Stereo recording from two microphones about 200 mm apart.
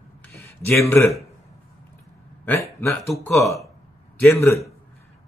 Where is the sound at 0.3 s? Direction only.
15° left (ahead or behind).